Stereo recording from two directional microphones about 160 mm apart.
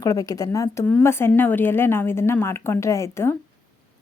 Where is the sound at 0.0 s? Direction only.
20° left (ahead or behind).